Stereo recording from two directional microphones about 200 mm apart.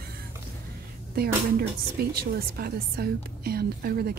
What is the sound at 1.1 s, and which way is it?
A woman's voice, 50° right (ahead or behind).